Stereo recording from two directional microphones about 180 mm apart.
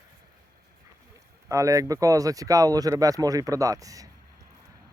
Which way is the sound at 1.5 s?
15° right (ahead or behind).